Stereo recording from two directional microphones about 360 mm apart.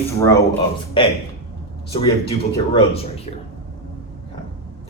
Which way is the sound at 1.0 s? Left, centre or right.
Centre.